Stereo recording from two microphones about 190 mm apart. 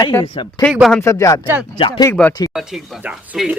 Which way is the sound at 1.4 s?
10° right (ahead or behind).